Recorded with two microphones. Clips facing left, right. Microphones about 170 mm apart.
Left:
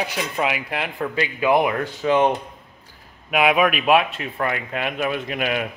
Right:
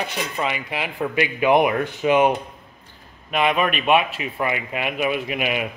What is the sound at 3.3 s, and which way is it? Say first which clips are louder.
A man's voice: left 2 dB; 5° left (ahead or behind).